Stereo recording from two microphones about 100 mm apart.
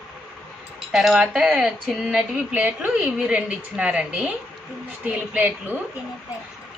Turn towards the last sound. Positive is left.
turn(degrees=-15)  # may be behind; listen again after turning